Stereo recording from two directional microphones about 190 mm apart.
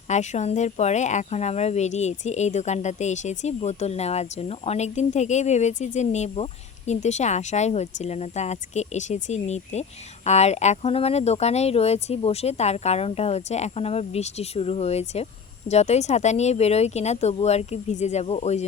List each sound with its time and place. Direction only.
0.1 s speech: 40° left (ahead or behind)